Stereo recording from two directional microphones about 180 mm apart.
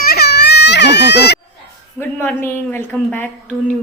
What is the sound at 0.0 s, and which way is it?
Baby cry, 60° left (ahead or behind).